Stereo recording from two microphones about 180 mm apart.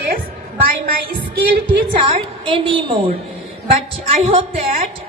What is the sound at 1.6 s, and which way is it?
A woman's voice, 25° right (ahead or behind).